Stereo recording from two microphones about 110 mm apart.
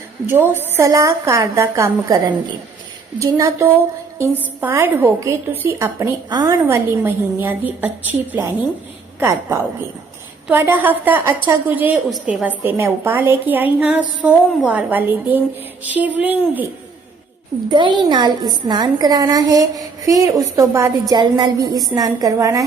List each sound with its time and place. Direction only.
0.3 s a woman's voice: 20° right (ahead or behind)
6.2 s a woman's voice: 40° right (ahead or behind)
6.5 s a woman's voice: 25° right (ahead or behind)
10.5 s a woman's voice: 20° right (ahead or behind)
17.7 s a woman's voice: 45° right (ahead or behind); by 20.9 s 30° right (ahead or behind)
21.1 s a woman's voice: 40° right (ahead or behind)